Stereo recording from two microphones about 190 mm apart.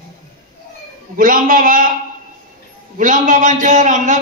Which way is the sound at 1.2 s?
45° right (ahead or behind).